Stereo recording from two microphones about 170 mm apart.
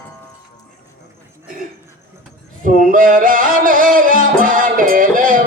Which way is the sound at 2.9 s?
55° right (ahead or behind).